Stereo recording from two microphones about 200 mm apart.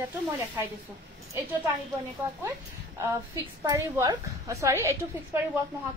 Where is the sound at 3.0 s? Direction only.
10° right (ahead or behind).